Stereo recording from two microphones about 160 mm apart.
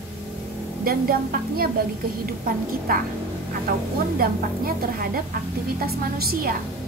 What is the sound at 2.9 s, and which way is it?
Speech, 65° right (ahead or behind).